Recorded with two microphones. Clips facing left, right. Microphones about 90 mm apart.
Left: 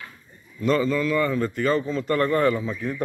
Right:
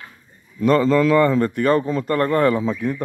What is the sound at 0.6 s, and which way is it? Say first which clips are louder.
A man's voice: right 6 dB; 80° right.